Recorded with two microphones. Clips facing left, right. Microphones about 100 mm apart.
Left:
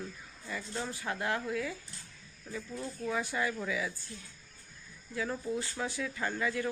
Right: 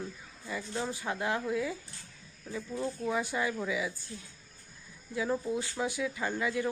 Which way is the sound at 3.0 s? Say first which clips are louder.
Even; 20° right (ahead or behind).